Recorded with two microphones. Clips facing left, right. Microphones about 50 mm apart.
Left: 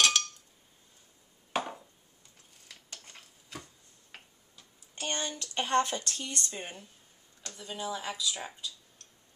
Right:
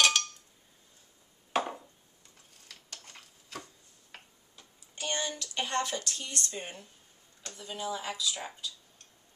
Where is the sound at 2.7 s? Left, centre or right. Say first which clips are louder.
Even; centre.